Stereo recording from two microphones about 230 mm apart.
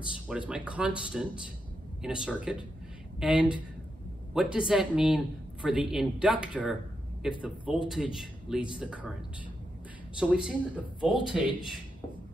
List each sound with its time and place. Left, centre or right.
0.1 s a man's voice: centre
10.1 s a man's voice: centre